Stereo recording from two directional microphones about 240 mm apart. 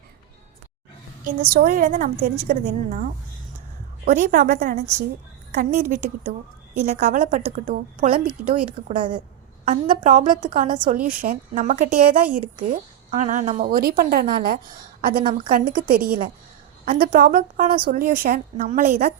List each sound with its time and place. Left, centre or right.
1.2 s a woman's voice: right
4.1 s a woman's voice: right
10.8 s a woman's voice: right